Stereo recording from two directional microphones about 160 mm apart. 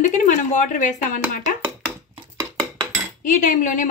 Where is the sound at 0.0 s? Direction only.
50° left (ahead or behind).